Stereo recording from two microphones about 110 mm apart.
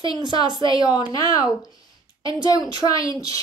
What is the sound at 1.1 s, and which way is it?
Speech, 35° left (ahead or behind).